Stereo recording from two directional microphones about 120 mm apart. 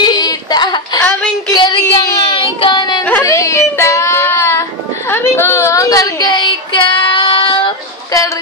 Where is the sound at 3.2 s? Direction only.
25° left (ahead or behind).